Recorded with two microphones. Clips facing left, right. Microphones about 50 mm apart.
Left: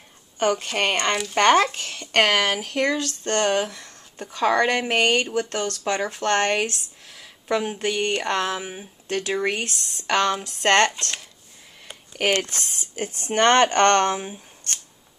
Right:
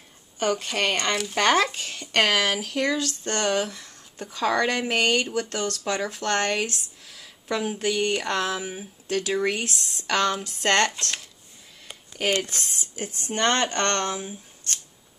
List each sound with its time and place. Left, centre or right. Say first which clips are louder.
0.7 s speech: left 2 dB; left
1.8 s speech: left 3 dB; centre
5.5 s speech: left 2 dB; left
9.7 s speech: right 1 dB; centre
10.0 s speech: left 2 dB; centre
12.2 s speech: left 3 dB; left
12.4 s speech: even; left